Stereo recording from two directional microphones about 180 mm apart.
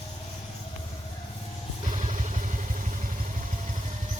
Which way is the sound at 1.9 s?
40° right (ahead or behind).